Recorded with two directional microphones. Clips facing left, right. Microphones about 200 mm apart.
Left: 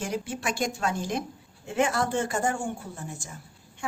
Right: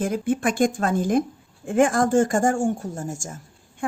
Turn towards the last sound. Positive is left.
turn(degrees=-45)  # may be behind; listen again after turning